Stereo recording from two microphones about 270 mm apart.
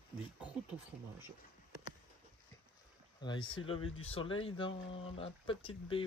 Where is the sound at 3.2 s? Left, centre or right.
Centre.